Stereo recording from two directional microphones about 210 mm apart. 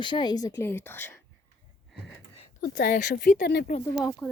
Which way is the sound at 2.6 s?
45° left (ahead or behind).